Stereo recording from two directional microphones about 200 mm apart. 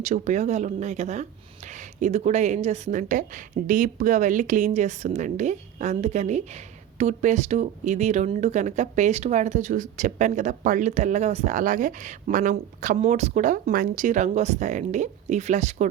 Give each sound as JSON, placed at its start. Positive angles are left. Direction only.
{"t": 0.0, "sound": "speech", "side_deg": -35}